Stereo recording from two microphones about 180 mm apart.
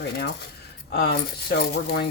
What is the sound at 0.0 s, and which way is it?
Speech, 65° left (ahead or behind).